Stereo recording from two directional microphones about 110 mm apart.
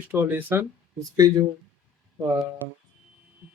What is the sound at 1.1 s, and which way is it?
Speech, 35° right (ahead or behind).